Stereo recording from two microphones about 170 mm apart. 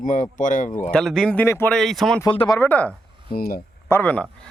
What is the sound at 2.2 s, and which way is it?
Speech, 25° left (ahead or behind).